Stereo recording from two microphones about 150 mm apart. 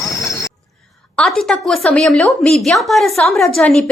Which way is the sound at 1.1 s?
Centre (ahead or behind).